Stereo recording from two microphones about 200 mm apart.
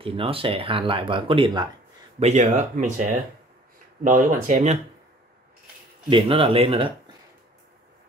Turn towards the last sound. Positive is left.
turn(degrees=-25)  # may be behind; listen again after turning